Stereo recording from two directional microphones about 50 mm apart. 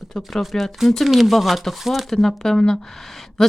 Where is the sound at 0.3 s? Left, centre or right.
Centre.